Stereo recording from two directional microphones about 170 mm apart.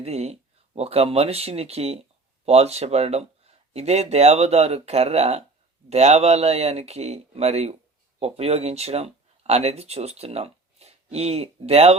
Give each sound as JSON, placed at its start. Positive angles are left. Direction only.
{"t": 0.0, "sound": "speech", "side_deg": -40}